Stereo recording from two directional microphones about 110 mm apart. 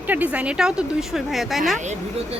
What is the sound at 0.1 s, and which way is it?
Speech, 15° right (ahead or behind).